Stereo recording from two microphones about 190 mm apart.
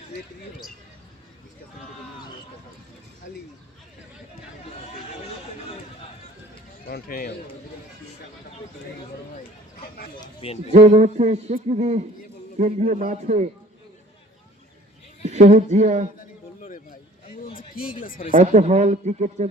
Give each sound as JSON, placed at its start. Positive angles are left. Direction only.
{"t": 3.3, "sound": "speech", "side_deg": 65}
{"t": 6.8, "sound": "speech", "side_deg": 50}
{"t": 10.2, "sound": "speech", "side_deg": 30}
{"t": 10.7, "sound": "a man's voice", "side_deg": -35}
{"t": 15.3, "sound": "a man's voice", "side_deg": -35}
{"t": 16.6, "sound": "a sound", "side_deg": 45}
{"t": 18.0, "sound": "speech", "side_deg": 50}
{"t": 18.3, "sound": "a man's voice", "side_deg": -40}